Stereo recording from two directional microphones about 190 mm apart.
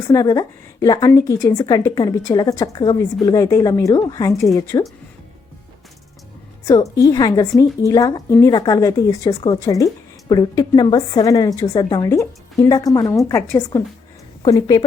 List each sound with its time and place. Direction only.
0.1 s a woman's voice: 20° left (ahead or behind)
6.9 s a woman's voice: 20° left (ahead or behind)